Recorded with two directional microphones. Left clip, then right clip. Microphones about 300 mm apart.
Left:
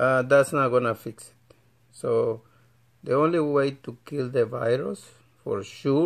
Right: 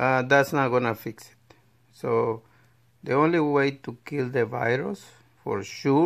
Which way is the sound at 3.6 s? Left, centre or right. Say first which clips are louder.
Even; centre.